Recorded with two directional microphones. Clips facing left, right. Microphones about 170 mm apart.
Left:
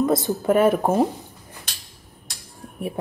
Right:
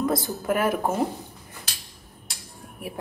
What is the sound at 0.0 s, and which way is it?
Speech, 25° left (ahead or behind).